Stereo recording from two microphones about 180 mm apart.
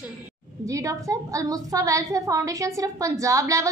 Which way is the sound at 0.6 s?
20° right (ahead or behind).